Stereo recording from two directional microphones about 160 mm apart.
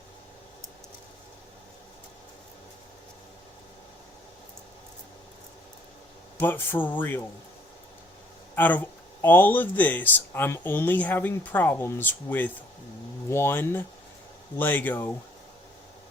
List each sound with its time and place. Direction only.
6.4 s speech: 15° left (ahead or behind)
8.5 s speech: 10° left (ahead or behind)